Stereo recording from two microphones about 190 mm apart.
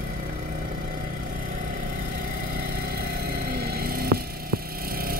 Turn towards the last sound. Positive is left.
turn(degrees=-50)  # may be behind; listen again after turning